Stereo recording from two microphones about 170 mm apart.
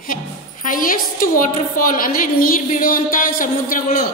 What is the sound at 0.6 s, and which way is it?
A woman's voice, 55° left (ahead or behind).